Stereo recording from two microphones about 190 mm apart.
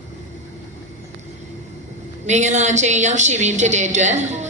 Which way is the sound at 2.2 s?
40° right (ahead or behind).